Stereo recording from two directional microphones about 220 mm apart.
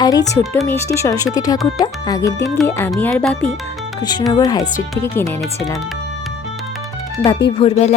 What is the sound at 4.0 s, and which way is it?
Speech, 20° left (ahead or behind).